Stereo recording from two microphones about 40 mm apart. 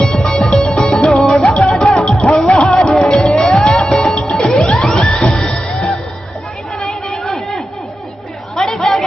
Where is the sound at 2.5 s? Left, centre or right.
Left.